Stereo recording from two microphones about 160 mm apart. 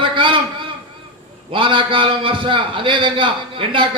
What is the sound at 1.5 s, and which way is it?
A man's voice, 30° right (ahead or behind).